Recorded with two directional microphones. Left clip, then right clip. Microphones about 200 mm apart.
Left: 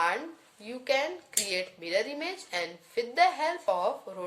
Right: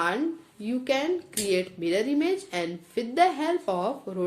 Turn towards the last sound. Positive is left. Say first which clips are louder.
# right 1 dB
turn(degrees=-20)  # may be behind; listen again after turning